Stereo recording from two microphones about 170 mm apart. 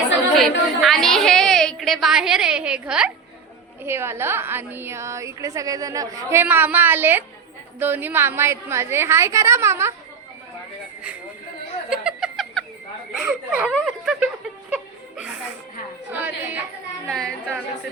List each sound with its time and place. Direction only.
0.3 s a woman's voice: centre (ahead or behind); by 9.9 s 15° right (ahead or behind)
11.9 s a sound: 5° right (ahead or behind)
13.1 s speech: 5° right (ahead or behind)
14.7 s chuckle: 5° right (ahead or behind)
16.1 s a woman's voice: 10° right (ahead or behind)
17.1 s speech: 5° left (ahead or behind)